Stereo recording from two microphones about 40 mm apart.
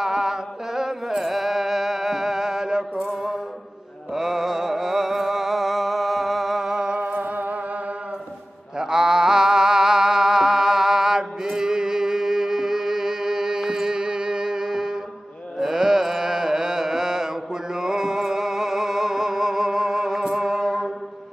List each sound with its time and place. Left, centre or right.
0.0 s music: centre
4.1 s music: centre
7.1 s music: right
8.7 s music: centre
15.6 s mantra: centre